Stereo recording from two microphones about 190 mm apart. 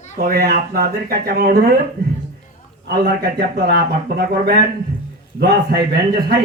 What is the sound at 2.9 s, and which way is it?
Speech, 55° right (ahead or behind).